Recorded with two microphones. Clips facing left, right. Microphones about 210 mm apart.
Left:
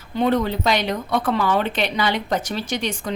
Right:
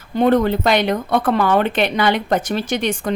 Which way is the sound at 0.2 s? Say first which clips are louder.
Right 5 dB; 55° right (ahead or behind).